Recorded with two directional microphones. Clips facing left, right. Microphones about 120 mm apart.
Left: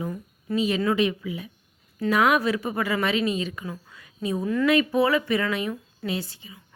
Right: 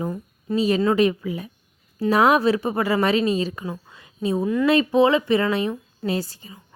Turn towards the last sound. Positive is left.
turn(degrees=-40)  # may be behind; listen again after turning